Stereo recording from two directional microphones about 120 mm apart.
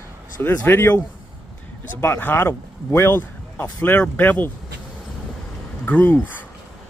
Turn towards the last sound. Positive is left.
turn(degrees=15)  # may be behind; listen again after turning